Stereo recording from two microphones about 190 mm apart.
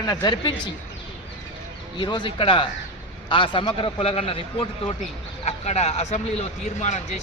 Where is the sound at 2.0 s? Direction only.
25° left (ahead or behind).